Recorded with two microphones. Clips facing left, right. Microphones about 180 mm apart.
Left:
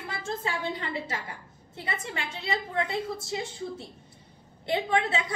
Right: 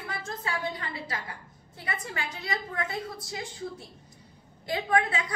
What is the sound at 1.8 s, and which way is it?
A woman's voice, 25° left (ahead or behind).